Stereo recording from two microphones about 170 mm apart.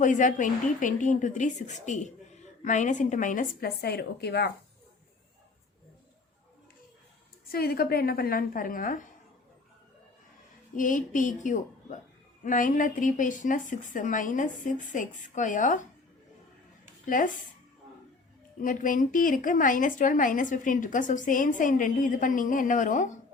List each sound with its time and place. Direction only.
0.0 s a woman's voice: 50° left (ahead or behind); by 4.5 s 75° left (ahead or behind)
7.5 s a woman's voice: 65° left (ahead or behind)
10.8 s a woman's voice: 50° left (ahead or behind)
17.1 s a woman's voice: 50° left (ahead or behind)
18.6 s a woman's voice: 50° left (ahead or behind)